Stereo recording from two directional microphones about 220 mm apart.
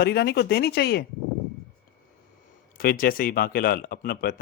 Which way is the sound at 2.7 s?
40° left (ahead or behind).